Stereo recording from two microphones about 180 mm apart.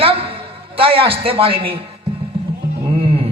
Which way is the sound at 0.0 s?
30° right (ahead or behind).